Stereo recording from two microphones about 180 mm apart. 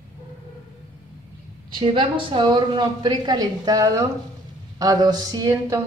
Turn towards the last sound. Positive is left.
turn(degrees=-20)  # may be behind; listen again after turning